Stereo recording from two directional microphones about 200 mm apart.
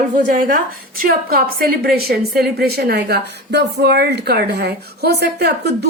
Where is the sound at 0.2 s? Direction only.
45° right (ahead or behind).